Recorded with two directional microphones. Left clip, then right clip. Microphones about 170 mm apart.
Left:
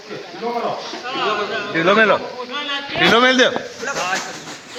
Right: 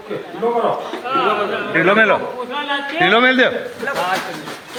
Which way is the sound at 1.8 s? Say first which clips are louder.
Right 1 dB; 45° left (ahead or behind).